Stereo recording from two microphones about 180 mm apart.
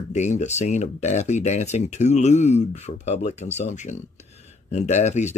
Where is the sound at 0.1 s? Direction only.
40° left (ahead or behind).